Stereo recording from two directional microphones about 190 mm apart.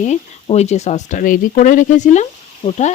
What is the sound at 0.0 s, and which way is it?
Speech, 35° left (ahead or behind).